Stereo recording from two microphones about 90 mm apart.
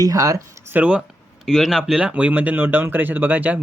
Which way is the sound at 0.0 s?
40° right (ahead or behind).